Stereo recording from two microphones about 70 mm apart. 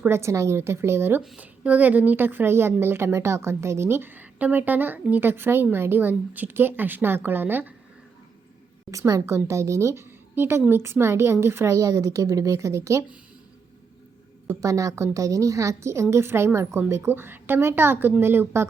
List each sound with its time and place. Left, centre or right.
0.1 s a woman's voice: right
1.4 s a woman's voice: right
8.9 s a woman's voice: right
14.6 s a woman's voice: right